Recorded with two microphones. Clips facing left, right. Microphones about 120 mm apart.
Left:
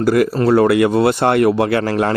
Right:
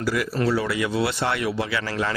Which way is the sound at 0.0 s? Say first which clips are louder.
Left 9 dB; 50° left (ahead or behind).